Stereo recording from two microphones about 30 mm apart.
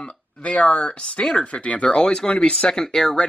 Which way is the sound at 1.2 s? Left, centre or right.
Left.